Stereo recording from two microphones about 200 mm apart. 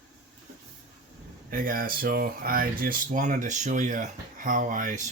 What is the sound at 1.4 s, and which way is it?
Speech, 45° right (ahead or behind).